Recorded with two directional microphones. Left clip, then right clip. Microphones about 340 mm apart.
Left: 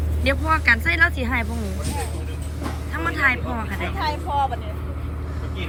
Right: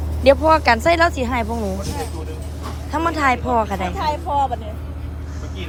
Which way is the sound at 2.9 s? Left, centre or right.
Centre.